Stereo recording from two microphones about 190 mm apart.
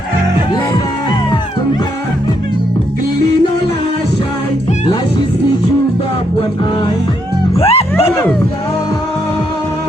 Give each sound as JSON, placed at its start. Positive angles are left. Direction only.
{"t": 7.6, "sound": "music", "side_deg": 30}